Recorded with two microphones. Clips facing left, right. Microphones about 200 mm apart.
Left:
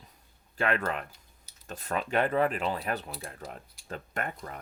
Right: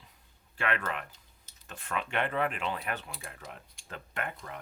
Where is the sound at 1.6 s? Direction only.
40° left (ahead or behind).